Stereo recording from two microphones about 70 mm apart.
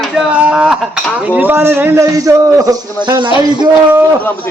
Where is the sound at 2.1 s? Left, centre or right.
Right.